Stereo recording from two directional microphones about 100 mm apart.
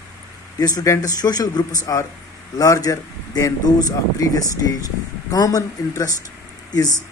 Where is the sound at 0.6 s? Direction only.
40° left (ahead or behind).